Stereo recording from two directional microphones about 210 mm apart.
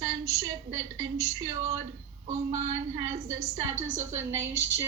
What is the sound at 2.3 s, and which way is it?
Speech, 35° right (ahead or behind).